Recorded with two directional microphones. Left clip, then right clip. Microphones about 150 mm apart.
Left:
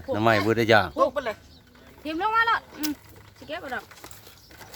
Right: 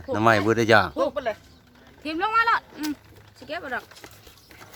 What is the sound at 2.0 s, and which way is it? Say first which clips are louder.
Speech: right 1 dB; 35° right (ahead or behind).